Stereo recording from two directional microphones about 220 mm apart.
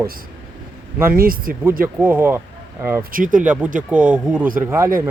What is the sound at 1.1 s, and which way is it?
Speech, 40° right (ahead or behind).